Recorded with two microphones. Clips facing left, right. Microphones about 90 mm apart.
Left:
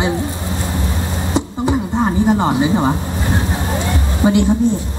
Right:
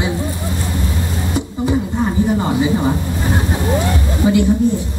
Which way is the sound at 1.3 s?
25° left (ahead or behind).